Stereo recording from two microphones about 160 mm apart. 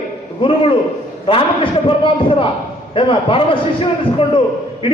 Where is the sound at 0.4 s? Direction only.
30° left (ahead or behind).